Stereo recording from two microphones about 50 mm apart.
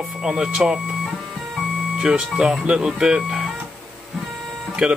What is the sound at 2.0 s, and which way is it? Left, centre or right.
Speech, centre.